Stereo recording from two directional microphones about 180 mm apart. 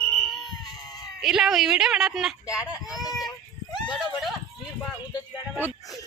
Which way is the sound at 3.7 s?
25° left (ahead or behind).